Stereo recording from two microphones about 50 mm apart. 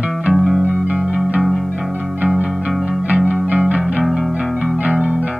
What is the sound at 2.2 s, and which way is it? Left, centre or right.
Music, right.